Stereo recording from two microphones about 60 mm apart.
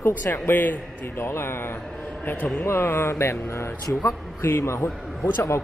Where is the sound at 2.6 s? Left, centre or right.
Left.